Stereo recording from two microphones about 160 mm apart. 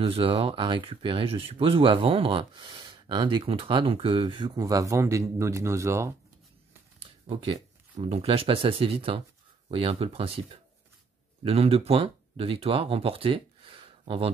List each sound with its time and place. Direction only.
0.0 s speech: 35° right (ahead or behind); by 6.1 s 15° right (ahead or behind)
7.0 s a sound: 35° right (ahead or behind)
8.1 s speech: 40° right (ahead or behind)